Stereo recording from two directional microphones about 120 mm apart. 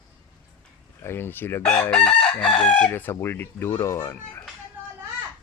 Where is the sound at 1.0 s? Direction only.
20° left (ahead or behind).